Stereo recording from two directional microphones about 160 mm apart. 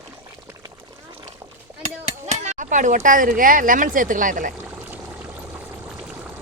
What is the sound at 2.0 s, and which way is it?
Speech, 45° right (ahead or behind).